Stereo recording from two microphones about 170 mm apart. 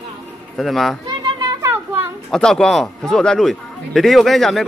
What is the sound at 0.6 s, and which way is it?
Speech, centre (ahead or behind).